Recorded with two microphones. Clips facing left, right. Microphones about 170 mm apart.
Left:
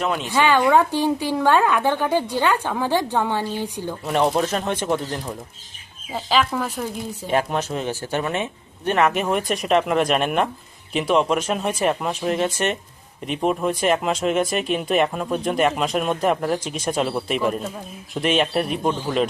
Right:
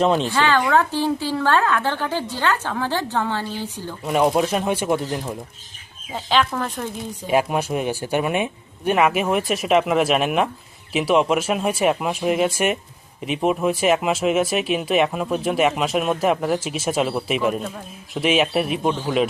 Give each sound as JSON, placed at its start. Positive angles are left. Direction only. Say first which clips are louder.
{"t": 0.0, "sound": "speech", "louder": "right 6 dB", "side_deg": -30}
{"t": 0.3, "sound": "a woman's voice", "louder": "left 2 dB", "side_deg": 15}
{"t": 4.0, "sound": "speech", "louder": "right 2 dB", "side_deg": -5}
{"t": 6.1, "sound": "speech", "louder": "even", "side_deg": 5}
{"t": 7.3, "sound": "speech", "louder": "right 2 dB", "side_deg": -10}